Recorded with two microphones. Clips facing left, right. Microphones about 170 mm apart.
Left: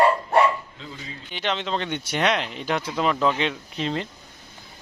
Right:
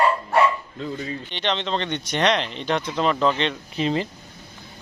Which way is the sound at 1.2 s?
5° left (ahead or behind).